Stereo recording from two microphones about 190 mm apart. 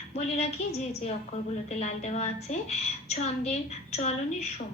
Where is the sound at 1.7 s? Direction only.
35° left (ahead or behind).